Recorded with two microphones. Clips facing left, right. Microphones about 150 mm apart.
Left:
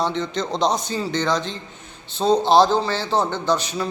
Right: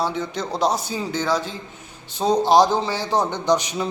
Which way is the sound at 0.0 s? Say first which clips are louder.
Left 1 dB; 10° right (ahead or behind).